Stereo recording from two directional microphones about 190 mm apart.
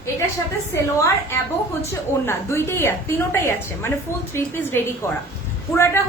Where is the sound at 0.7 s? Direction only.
15° left (ahead or behind).